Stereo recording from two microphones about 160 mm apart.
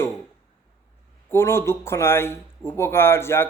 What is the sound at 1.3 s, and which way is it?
A man's voice, 15° left (ahead or behind).